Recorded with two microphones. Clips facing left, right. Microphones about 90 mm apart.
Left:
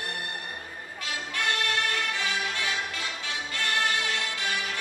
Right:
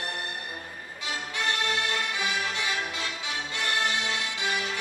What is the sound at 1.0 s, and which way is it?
Music, 20° right (ahead or behind).